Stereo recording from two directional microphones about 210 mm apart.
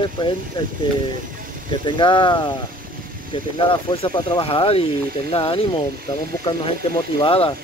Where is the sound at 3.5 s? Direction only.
25° left (ahead or behind).